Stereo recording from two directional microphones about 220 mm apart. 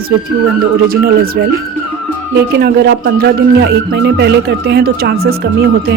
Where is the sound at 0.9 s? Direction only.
45° right (ahead or behind).